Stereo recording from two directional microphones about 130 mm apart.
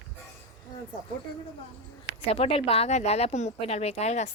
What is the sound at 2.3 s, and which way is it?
Speech, 45° left (ahead or behind).